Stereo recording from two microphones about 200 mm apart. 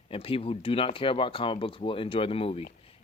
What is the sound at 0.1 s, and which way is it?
Speech, 30° left (ahead or behind).